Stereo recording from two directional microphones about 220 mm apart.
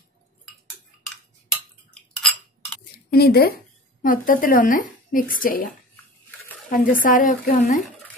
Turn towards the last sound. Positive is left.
turn(degrees=35)  # may be behind; listen again after turning